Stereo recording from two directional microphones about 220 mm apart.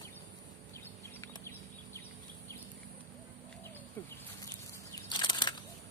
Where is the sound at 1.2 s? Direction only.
10° left (ahead or behind).